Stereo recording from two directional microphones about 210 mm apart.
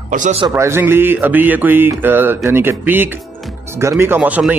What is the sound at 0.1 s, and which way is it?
Speech, 35° right (ahead or behind).